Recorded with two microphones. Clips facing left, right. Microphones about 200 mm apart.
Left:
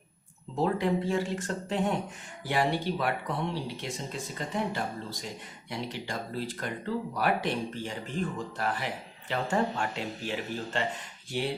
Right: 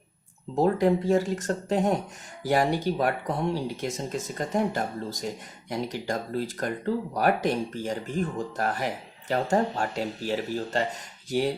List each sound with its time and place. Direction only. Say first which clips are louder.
0.5 s speech: right 5 dB; 40° right (ahead or behind)